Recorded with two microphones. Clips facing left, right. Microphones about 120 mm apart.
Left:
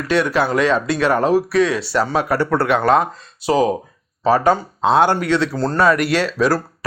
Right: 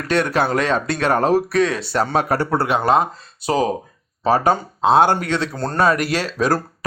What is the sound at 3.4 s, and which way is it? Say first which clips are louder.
Speech: left 3 dB; 20° left (ahead or behind).